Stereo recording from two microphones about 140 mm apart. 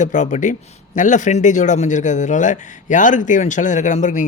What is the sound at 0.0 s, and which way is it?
A man's voice, 60° left (ahead or behind).